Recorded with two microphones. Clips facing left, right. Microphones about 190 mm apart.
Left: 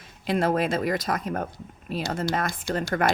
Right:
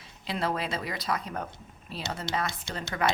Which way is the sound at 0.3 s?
50° left (ahead or behind).